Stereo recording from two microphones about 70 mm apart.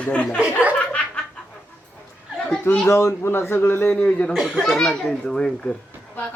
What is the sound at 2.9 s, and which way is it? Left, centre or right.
A man's voice, left.